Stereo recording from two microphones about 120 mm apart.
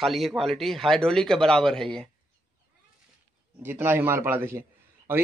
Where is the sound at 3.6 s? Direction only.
20° right (ahead or behind).